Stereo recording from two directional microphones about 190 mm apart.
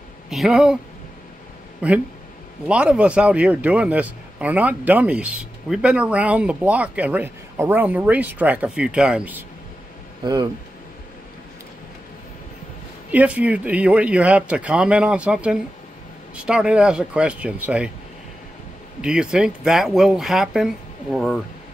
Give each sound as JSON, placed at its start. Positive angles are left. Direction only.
{"t": 0.3, "sound": "speech", "side_deg": 0}
{"t": 1.8, "sound": "speech", "side_deg": -5}
{"t": 10.2, "sound": "speech", "side_deg": -20}
{"t": 13.1, "sound": "speech", "side_deg": -5}
{"t": 18.9, "sound": "speech", "side_deg": -5}